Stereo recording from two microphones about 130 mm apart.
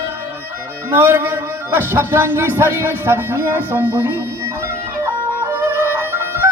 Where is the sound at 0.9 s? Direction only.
15° right (ahead or behind).